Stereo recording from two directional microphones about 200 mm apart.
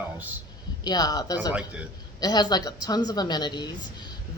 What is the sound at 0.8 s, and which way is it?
Speech, 20° left (ahead or behind).